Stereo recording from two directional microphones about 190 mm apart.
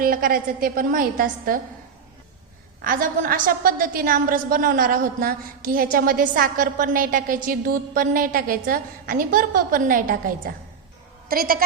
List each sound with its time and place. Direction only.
0.0 s a woman's voice: 50° right (ahead or behind)
2.8 s a woman's voice: 45° right (ahead or behind)